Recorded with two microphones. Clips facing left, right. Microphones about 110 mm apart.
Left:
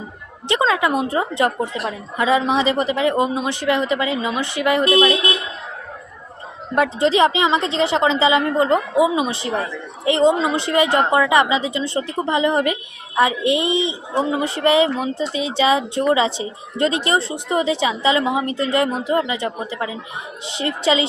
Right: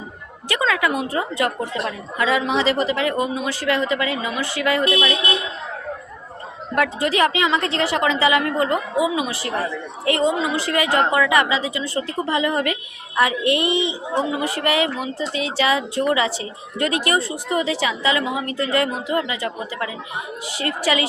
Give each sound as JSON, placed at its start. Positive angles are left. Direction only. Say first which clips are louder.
{"t": 0.4, "sound": "a woman's voice", "louder": "left 3 dB", "side_deg": 25}
{"t": 6.7, "sound": "a woman's voice", "louder": "left 3 dB", "side_deg": 20}